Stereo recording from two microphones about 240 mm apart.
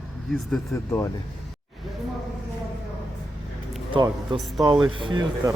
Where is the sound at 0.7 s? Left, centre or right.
Centre.